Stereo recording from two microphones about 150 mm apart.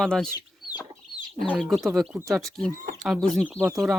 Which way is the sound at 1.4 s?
Centre (ahead or behind).